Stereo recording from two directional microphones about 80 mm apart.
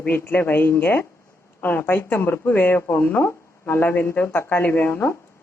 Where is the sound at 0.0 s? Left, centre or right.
Left.